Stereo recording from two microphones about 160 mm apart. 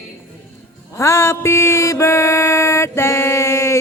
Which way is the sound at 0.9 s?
15° left (ahead or behind).